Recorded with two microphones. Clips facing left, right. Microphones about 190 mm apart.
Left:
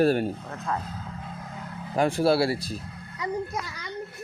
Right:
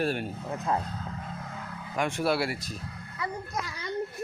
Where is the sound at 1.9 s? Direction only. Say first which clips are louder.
Left 6 dB; 35° left (ahead or behind).